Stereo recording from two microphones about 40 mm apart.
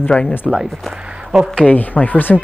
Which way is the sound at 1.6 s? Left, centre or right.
Left.